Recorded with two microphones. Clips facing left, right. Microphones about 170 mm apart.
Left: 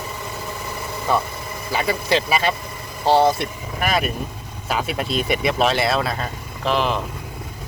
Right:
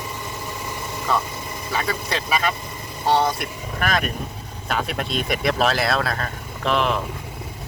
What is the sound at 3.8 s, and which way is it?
Speech, 5° left (ahead or behind).